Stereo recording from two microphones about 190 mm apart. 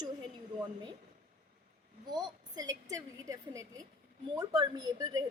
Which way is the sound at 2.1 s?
20° right (ahead or behind).